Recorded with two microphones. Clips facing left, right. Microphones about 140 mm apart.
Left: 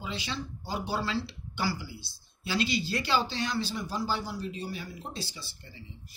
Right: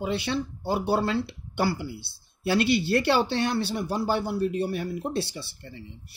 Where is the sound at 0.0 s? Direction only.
60° right (ahead or behind).